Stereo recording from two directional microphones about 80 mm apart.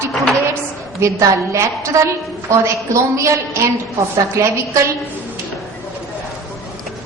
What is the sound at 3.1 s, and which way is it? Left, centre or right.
A woman's voice, right.